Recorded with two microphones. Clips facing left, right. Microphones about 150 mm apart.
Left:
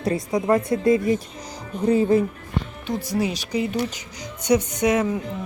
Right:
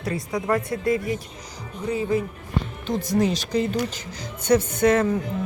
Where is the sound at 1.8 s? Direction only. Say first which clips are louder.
Left 6 dB; 35° left (ahead or behind).